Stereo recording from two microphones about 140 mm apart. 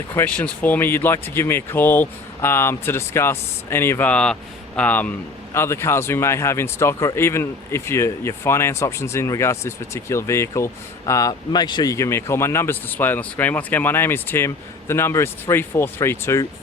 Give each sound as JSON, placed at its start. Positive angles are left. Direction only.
{"t": 0.1, "sound": "speech", "side_deg": 10}